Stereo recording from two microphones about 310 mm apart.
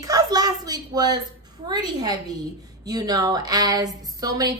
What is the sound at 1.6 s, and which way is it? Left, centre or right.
A woman's voice, centre.